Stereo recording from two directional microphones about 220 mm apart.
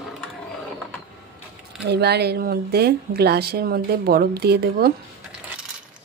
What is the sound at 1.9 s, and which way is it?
A woman's voice, 50° right (ahead or behind).